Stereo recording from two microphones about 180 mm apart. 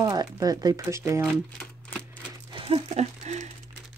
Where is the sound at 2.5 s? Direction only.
30° right (ahead or behind).